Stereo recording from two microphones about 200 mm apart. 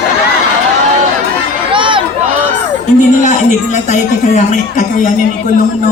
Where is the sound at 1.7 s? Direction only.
25° right (ahead or behind).